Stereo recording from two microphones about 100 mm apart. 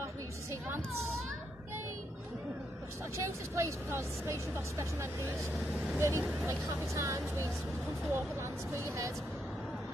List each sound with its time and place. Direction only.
0.0 s a sound: 25° right (ahead or behind)
3.2 s speech: 30° right (ahead or behind)
5.6 s speech: 5° right (ahead or behind)
5.9 s speech: 30° right (ahead or behind)